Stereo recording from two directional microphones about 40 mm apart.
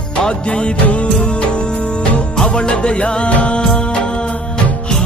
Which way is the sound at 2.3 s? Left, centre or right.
Left.